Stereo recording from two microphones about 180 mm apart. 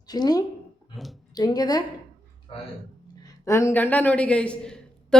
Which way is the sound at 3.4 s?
15° left (ahead or behind).